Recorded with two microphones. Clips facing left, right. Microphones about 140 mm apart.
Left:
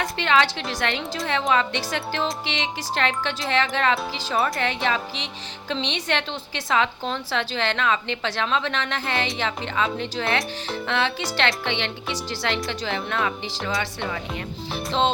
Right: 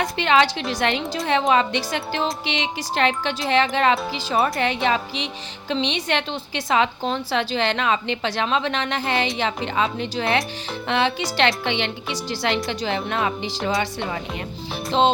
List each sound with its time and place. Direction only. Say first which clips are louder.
0.0 s speech: right 3 dB; 15° right (ahead or behind)